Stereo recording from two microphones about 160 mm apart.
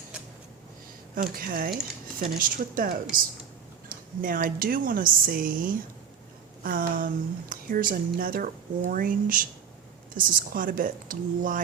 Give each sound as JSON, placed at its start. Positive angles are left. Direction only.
{"t": 1.1, "sound": "speech", "side_deg": -60}